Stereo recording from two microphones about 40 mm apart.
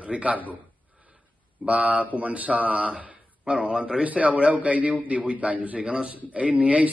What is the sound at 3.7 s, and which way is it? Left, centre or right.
Speech, centre.